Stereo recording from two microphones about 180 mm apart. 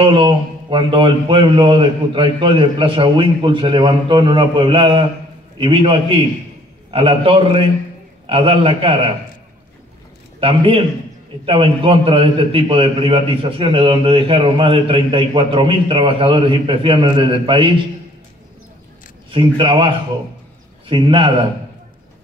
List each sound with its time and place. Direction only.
0.0 s a man's voice: 30° right (ahead or behind)
10.4 s a man's voice: 30° right (ahead or behind)
19.3 s a man's voice: 30° right (ahead or behind)
20.9 s a man's voice: 30° right (ahead or behind)